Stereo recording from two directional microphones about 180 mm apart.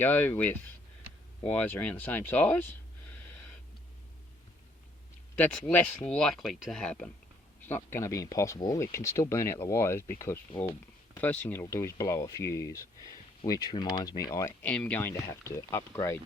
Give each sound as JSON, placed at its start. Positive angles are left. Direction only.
{"t": 0.0, "sound": "speech", "side_deg": 10}
{"t": 5.4, "sound": "speech", "side_deg": 10}
{"t": 14.6, "sound": "speech", "side_deg": 5}